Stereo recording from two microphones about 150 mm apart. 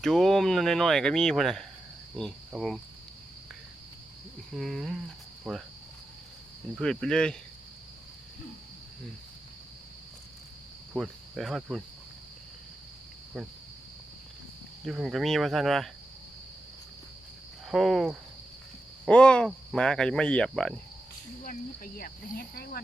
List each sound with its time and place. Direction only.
0.0 s speech: centre (ahead or behind)
4.5 s speech: centre (ahead or behind)
6.7 s speech: 5° left (ahead or behind)
10.9 s cricket: centre (ahead or behind)
14.8 s speech: centre (ahead or behind)
17.7 s speech: centre (ahead or behind)
21.9 s speech: 85° left